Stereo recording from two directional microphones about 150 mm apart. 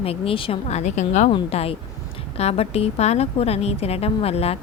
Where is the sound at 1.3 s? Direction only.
35° left (ahead or behind).